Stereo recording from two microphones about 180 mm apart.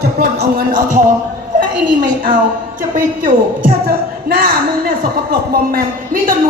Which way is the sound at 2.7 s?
50° right (ahead or behind).